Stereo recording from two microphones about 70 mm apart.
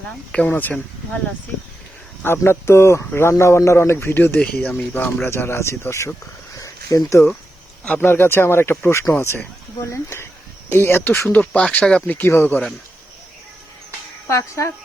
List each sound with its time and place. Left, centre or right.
0.3 s speech: centre
2.2 s speech: left
3.9 s speech: left
5.3 s speech: left
6.6 s a sound: left
8.0 s speech: left
11.3 s speech: centre
12.1 s speech: left
14.3 s speech: left